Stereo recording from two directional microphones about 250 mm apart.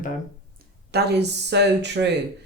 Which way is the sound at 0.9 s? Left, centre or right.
Right.